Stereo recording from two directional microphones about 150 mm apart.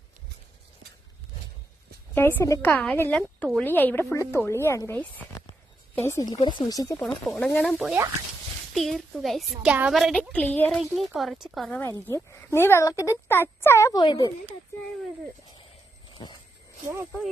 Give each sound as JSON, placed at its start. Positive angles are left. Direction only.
{"t": 2.1, "sound": "a woman's voice", "side_deg": 15}
{"t": 7.0, "sound": "a woman's voice", "side_deg": 5}
{"t": 10.8, "sound": "a woman's voice", "side_deg": 0}
{"t": 11.7, "sound": "a woman's voice", "side_deg": 15}
{"t": 14.0, "sound": "speech", "side_deg": 30}
{"t": 16.1, "sound": "a sound", "side_deg": 30}
{"t": 16.8, "sound": "speech", "side_deg": -15}